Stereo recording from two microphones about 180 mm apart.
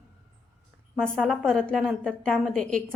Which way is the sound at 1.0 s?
5° left (ahead or behind).